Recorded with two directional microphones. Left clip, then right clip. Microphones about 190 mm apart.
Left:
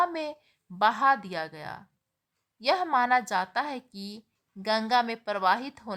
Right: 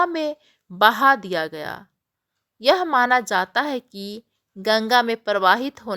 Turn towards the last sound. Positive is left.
turn(degrees=-30)  # may be behind; listen again after turning